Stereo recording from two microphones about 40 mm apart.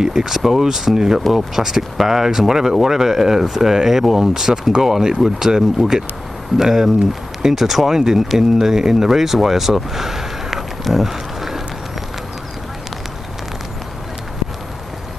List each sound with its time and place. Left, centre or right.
0.0 s speech: centre